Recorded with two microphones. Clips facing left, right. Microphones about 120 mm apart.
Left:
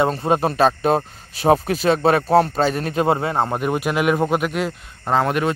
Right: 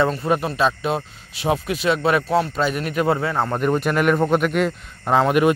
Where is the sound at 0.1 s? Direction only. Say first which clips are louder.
Left 2 dB; 30° left (ahead or behind).